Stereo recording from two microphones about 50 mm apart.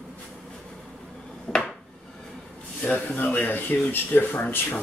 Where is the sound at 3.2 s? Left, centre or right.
Left.